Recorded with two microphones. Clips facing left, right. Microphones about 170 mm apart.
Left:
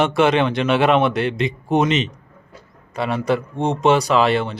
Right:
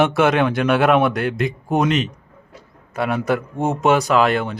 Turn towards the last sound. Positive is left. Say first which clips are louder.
# even
turn(degrees=0)  # may be behind; listen again after turning